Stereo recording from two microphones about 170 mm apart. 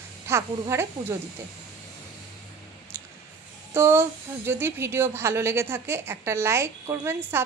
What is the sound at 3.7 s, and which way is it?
A woman's voice, 15° right (ahead or behind).